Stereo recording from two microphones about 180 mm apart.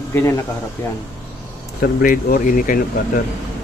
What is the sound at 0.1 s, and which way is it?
Speech, 15° left (ahead or behind).